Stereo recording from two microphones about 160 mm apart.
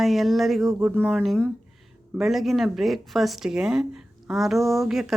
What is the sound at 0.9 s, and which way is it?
Speech, 5° left (ahead or behind).